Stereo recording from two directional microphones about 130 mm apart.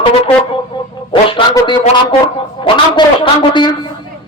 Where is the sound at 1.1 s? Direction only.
40° left (ahead or behind).